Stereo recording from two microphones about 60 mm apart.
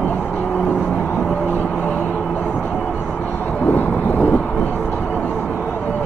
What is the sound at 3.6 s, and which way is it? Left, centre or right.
Vehicle, left.